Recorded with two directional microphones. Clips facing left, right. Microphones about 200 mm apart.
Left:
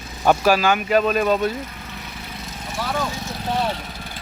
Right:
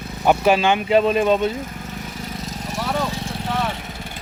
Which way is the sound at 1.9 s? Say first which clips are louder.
Right 5 dB; 45° right (ahead or behind).